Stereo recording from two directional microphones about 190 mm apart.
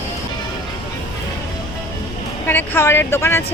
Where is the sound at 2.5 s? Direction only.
10° left (ahead or behind).